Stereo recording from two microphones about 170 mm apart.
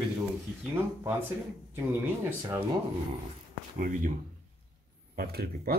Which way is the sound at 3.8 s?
50° right (ahead or behind).